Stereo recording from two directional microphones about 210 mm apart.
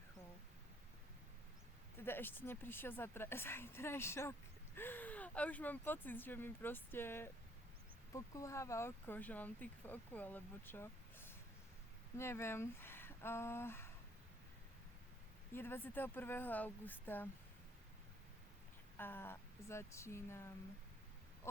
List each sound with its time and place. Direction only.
2.0 s speech: 10° left (ahead or behind)
15.5 s speech: 10° left (ahead or behind)
18.9 s speech: 10° left (ahead or behind)